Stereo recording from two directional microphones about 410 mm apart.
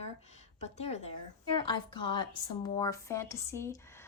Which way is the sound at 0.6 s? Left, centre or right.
Centre.